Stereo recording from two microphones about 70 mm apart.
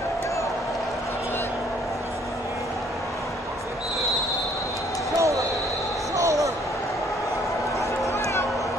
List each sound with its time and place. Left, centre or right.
5.1 s basketball bounce: right